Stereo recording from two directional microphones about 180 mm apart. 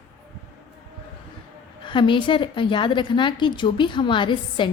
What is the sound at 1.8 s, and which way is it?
A woman's voice, 25° left (ahead or behind).